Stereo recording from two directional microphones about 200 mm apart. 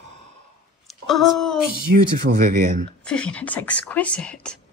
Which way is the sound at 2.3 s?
40° right (ahead or behind).